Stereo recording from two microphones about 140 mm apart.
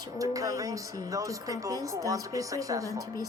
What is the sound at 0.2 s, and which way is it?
Speech, 25° right (ahead or behind).